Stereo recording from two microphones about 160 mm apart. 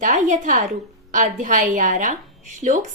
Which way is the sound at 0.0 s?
55° right (ahead or behind).